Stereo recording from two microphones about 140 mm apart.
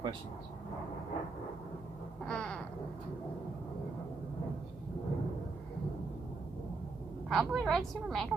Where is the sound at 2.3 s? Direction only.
5° left (ahead or behind).